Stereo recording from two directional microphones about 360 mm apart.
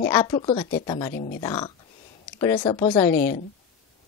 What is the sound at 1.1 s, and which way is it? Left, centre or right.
Speech, left.